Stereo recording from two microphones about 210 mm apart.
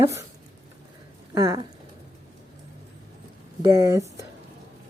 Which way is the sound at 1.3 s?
15° right (ahead or behind).